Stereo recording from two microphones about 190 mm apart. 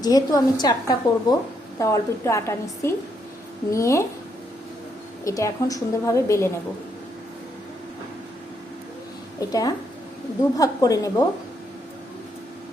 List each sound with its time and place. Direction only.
0.0 s a woman's voice: 20° left (ahead or behind)
5.2 s a woman's voice: 15° left (ahead or behind)
9.4 s a woman's voice: 20° left (ahead or behind)